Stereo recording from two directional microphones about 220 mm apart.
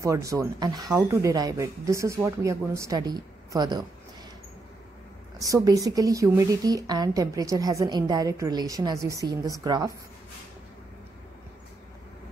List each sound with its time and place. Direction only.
0.0 s a woman's voice: 15° right (ahead or behind)
5.4 s a woman's voice: 15° right (ahead or behind)